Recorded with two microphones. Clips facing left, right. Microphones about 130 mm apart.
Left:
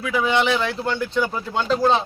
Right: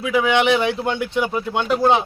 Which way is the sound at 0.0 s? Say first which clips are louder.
Right 3 dB; 15° right (ahead or behind).